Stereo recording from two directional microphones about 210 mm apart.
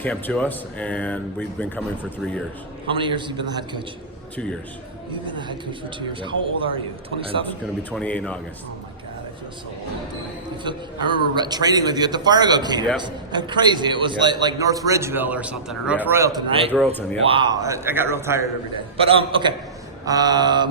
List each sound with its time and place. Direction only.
0.0 s speech: 5° left (ahead or behind)
2.8 s a man's voice: 25° right (ahead or behind)
5.2 s a man's voice: 20° right (ahead or behind)
7.4 s speech: 5° left (ahead or behind)
10.6 s a man's voice: 20° right (ahead or behind)
16.5 s a man's voice: 25° right (ahead or behind)
16.8 s speech: 10° left (ahead or behind)
17.2 s a man's voice: 25° right (ahead or behind)
18.9 s a man's voice: 25° right (ahead or behind)